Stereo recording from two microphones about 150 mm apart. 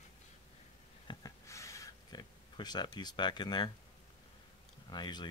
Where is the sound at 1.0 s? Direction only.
20° left (ahead or behind).